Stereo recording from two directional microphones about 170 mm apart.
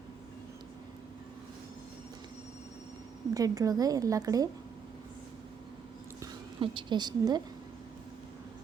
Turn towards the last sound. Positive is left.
turn(degrees=-25)  # may be behind; listen again after turning